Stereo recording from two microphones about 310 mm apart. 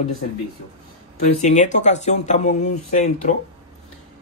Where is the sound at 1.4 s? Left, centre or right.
Left.